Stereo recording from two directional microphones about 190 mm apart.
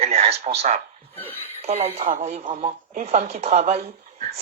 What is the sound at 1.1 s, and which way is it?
Speech, 10° left (ahead or behind).